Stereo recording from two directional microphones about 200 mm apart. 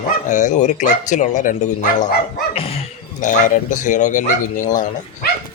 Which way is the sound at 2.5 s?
30° left (ahead or behind).